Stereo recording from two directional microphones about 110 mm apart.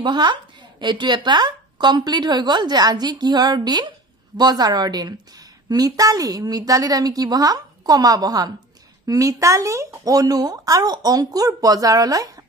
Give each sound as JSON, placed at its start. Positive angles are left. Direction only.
{"t": 0.0, "sound": "a woman's voice", "side_deg": -45}